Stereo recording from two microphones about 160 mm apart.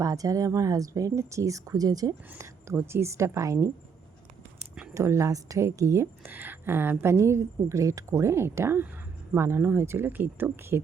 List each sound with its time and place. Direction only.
0.0 s a woman's voice: 20° right (ahead or behind)
4.9 s a woman's voice: 20° right (ahead or behind)